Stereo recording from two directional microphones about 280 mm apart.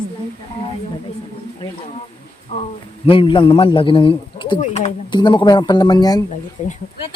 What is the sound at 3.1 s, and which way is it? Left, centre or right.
A man's voice, centre.